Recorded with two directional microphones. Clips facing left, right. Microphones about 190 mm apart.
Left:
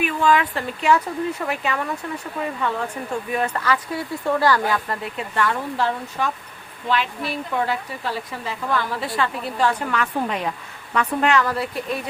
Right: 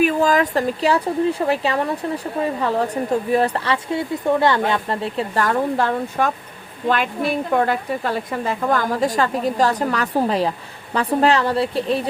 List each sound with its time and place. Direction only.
0.0 s a woman's voice: 40° right (ahead or behind)